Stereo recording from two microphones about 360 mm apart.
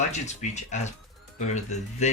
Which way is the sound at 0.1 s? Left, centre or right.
Centre.